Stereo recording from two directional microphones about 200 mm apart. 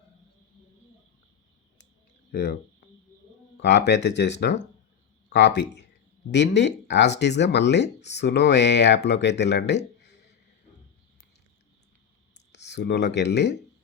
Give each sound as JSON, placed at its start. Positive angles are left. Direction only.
{"t": 2.3, "sound": "speech", "side_deg": 55}
{"t": 3.6, "sound": "speech", "side_deg": 60}
{"t": 12.5, "sound": "speech", "side_deg": 60}